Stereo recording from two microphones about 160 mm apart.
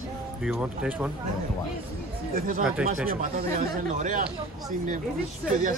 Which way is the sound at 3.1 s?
65° right (ahead or behind).